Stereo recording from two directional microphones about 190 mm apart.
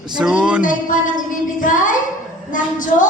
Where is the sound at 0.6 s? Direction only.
45° left (ahead or behind).